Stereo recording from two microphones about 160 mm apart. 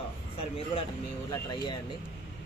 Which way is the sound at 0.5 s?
35° left (ahead or behind).